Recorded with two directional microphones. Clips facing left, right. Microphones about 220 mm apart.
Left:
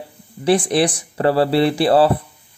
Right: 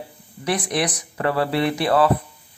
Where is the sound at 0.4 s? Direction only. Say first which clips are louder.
Left 7 dB; 30° left (ahead or behind).